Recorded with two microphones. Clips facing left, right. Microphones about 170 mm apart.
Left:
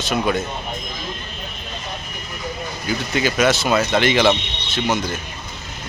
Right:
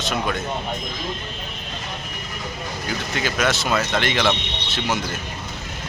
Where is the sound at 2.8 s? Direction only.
Centre (ahead or behind).